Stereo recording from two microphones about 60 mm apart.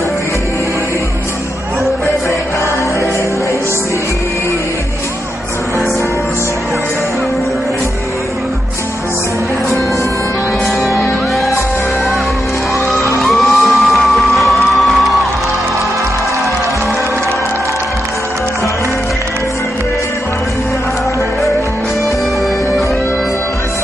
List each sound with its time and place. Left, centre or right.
13.2 s music: centre